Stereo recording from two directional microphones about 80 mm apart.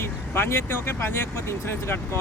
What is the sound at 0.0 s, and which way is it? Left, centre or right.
Speech, left.